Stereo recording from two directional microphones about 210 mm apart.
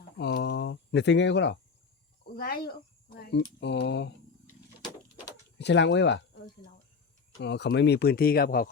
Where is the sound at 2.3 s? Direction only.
45° left (ahead or behind).